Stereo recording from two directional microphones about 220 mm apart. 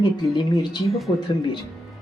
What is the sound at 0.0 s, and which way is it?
Speech, 20° left (ahead or behind).